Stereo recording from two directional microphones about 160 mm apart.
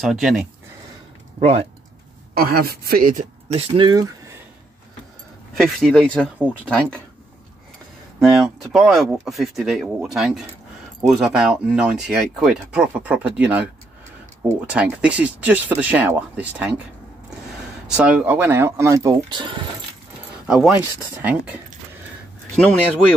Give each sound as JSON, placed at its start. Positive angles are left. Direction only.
{"t": 0.0, "sound": "speech", "side_deg": 0}
{"t": 1.4, "sound": "speech", "side_deg": -40}
{"t": 2.3, "sound": "a woman's voice", "side_deg": -70}
{"t": 3.5, "sound": "speech", "side_deg": -40}
{"t": 3.8, "sound": "speech", "side_deg": -25}
{"t": 5.6, "sound": "speech", "side_deg": 0}
{"t": 6.3, "sound": "speech", "side_deg": -10}
{"t": 8.2, "sound": "speech", "side_deg": 0}
{"t": 14.7, "sound": "speech", "side_deg": -5}
{"t": 17.8, "sound": "speech", "side_deg": -5}
{"t": 20.4, "sound": "speech", "side_deg": -5}